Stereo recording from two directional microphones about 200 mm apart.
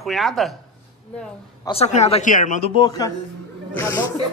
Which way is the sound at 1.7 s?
35° left (ahead or behind).